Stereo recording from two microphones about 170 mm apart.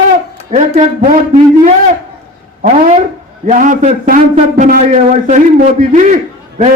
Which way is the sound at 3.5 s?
45° right (ahead or behind).